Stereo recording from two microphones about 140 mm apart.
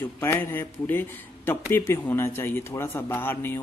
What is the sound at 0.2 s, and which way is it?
A man's voice, 15° left (ahead or behind).